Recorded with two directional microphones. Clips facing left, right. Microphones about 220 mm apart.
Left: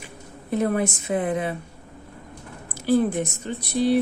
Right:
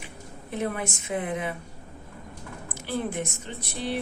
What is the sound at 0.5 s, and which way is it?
Speech, 40° left (ahead or behind).